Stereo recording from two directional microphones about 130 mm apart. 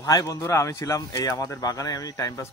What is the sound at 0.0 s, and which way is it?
Speech, 25° left (ahead or behind).